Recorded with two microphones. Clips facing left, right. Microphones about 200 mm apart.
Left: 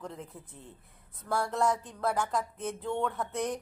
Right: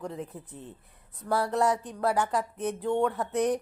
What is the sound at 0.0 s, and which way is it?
A woman's voice, 15° right (ahead or behind).